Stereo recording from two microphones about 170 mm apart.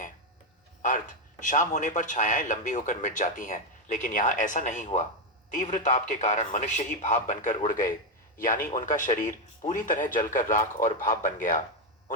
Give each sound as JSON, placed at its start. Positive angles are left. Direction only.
{"t": 0.8, "sound": "a man's voice", "side_deg": 50}